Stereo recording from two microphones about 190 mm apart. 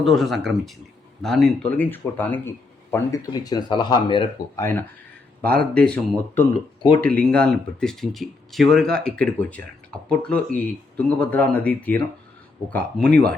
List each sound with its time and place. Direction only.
0.0 s speech: centre (ahead or behind); by 4.3 s 25° left (ahead or behind)
4.5 s speech: 10° left (ahead or behind)